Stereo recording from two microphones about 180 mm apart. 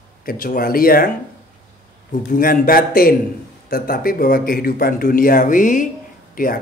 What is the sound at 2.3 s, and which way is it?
A man's voice, 55° left (ahead or behind).